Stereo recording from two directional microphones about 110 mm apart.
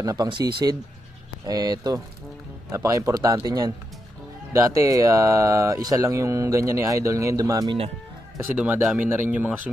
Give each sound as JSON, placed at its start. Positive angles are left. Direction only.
{"t": 0.0, "sound": "speech", "side_deg": -35}
{"t": 8.4, "sound": "speech", "side_deg": -20}